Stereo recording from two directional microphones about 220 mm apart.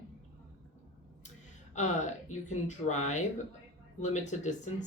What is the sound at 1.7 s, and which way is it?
Speech, 35° left (ahead or behind).